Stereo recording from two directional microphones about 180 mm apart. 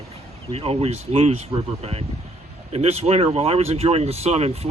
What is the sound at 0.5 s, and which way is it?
Speech, 35° right (ahead or behind).